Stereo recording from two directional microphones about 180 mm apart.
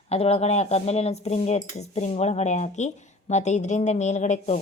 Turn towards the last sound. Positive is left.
turn(degrees=40)  # may be behind; listen again after turning